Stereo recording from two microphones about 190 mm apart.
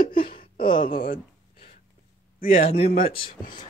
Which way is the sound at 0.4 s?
25° left (ahead or behind).